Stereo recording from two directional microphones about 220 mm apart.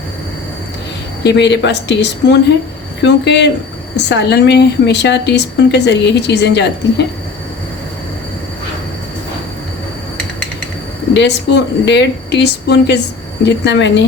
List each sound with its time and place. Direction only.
1.2 s speech: 50° left (ahead or behind)
11.1 s speech: 55° left (ahead or behind)